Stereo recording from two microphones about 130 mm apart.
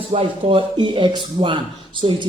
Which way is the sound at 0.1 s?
45° right (ahead or behind).